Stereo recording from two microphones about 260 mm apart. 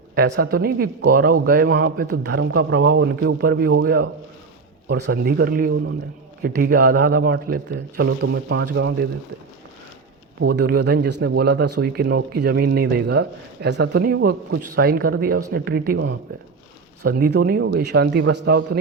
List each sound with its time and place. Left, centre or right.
0.2 s speech: right
4.9 s speech: right
10.5 s speech: right